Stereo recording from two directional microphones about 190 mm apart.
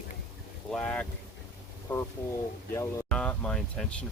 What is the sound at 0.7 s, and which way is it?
Speech, 5° left (ahead or behind).